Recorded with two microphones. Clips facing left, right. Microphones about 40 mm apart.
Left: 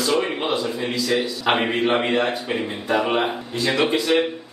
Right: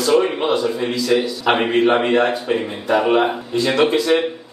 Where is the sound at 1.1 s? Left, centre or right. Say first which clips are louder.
Right 4 dB; right; by 3.3 s centre.